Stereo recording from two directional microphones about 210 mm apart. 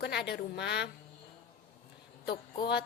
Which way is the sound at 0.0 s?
50° left (ahead or behind).